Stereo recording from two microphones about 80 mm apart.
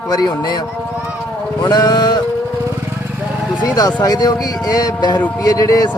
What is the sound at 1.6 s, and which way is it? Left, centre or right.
Speech, left.